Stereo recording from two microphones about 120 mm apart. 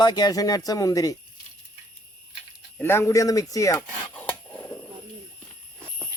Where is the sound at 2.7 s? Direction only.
20° left (ahead or behind).